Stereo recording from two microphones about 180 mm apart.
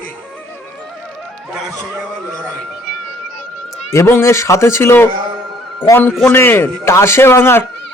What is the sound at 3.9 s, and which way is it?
A man's voice, 15° left (ahead or behind).